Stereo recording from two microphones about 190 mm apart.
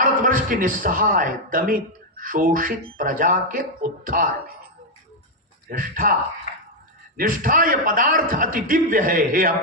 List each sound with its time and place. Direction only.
0.0 s a man's voice: 45° right (ahead or behind)
5.6 s a man's voice: 50° right (ahead or behind)
7.2 s a man's voice: 45° right (ahead or behind)